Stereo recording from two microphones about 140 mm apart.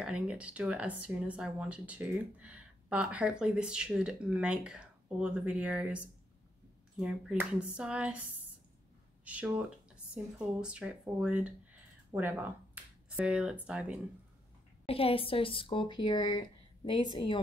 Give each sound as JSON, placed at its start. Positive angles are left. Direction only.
{"t": 0.0, "sound": "speech", "side_deg": -5}
{"t": 7.0, "sound": "speech", "side_deg": -5}
{"t": 9.2, "sound": "speech", "side_deg": -10}
{"t": 14.9, "sound": "speech", "side_deg": 45}